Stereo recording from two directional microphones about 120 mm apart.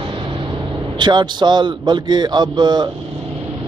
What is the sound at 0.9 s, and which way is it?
Speech, 40° right (ahead or behind).